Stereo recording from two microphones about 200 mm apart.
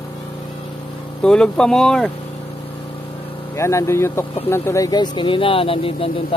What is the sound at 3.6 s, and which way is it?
Speech, 15° left (ahead or behind).